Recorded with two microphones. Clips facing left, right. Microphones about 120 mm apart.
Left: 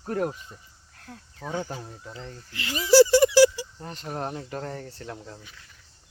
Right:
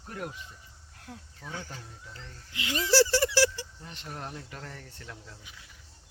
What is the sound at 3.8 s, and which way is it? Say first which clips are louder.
Speech: left 10 dB; 45° left (ahead or behind).